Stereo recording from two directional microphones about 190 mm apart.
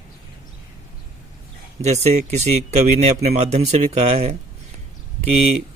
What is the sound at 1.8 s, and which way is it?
Speech, 35° right (ahead or behind).